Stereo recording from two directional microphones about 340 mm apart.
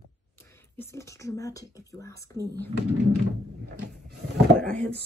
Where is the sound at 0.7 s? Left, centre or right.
Centre.